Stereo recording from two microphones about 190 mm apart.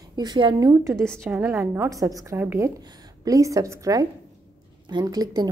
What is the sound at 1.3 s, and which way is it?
A woman's voice, 10° right (ahead or behind).